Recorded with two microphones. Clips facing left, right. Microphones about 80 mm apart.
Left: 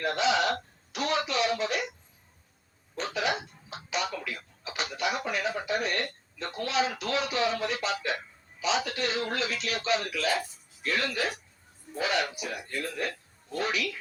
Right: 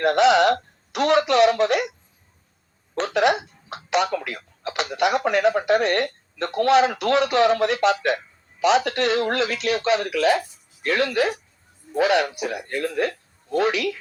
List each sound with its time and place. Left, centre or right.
0.0 s speech: right
2.9 s a sound: right
4.6 s speech: right